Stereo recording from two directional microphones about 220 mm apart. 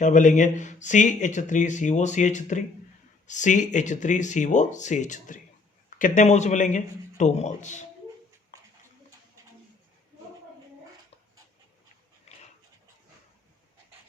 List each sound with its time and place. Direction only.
0.0 s speech: 35° left (ahead or behind)